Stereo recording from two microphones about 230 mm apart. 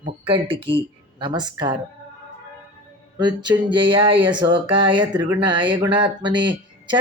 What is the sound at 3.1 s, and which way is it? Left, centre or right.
Speech, centre.